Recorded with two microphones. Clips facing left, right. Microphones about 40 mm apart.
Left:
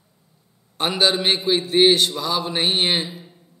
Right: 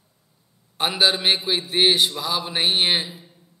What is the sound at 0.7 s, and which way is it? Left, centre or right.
A man's voice, centre.